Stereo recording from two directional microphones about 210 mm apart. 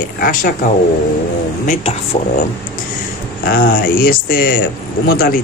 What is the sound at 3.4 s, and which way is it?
Speech, 45° left (ahead or behind).